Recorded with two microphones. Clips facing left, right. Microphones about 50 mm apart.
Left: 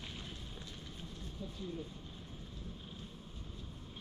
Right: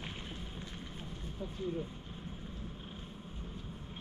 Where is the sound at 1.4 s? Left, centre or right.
Right.